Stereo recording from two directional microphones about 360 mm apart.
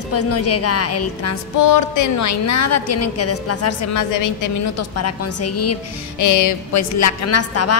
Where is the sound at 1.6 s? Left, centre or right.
Left.